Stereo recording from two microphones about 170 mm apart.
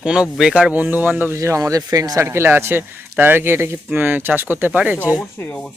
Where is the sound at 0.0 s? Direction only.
5° right (ahead or behind).